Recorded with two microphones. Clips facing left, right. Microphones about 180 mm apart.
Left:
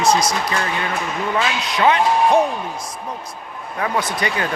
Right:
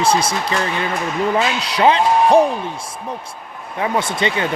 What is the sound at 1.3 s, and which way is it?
Speech, 35° right (ahead or behind).